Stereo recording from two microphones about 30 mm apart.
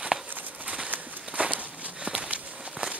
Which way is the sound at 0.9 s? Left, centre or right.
Right.